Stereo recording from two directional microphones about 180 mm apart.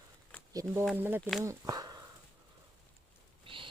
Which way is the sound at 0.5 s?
20° right (ahead or behind).